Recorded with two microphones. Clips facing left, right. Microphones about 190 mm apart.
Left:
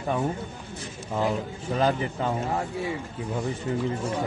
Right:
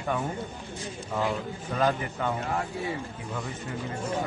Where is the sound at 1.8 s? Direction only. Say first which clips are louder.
Left 2 dB; 30° left (ahead or behind).